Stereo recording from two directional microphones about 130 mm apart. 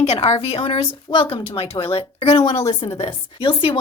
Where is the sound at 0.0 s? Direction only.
55° left (ahead or behind).